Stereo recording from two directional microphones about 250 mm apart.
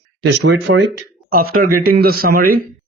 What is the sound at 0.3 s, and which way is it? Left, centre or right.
Speech, right.